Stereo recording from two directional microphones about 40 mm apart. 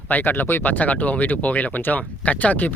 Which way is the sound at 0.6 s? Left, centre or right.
Left.